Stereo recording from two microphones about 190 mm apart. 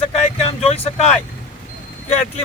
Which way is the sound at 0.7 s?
35° left (ahead or behind).